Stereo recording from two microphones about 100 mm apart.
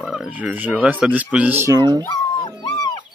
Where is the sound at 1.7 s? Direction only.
40° right (ahead or behind).